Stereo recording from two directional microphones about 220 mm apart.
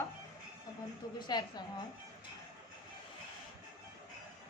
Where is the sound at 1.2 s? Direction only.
20° left (ahead or behind).